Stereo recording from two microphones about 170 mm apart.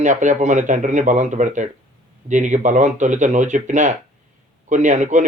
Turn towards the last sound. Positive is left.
turn(degrees=-45)  # may be behind; listen again after turning